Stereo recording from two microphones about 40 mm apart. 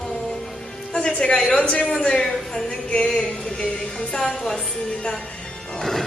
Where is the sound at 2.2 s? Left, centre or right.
Centre.